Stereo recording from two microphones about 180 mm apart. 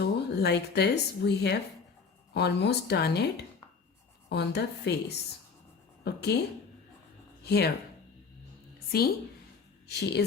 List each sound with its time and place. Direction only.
0.0 s a woman's voice: 65° left (ahead or behind)
7.4 s speech: 65° left (ahead or behind)
8.9 s a woman's voice: 60° left (ahead or behind)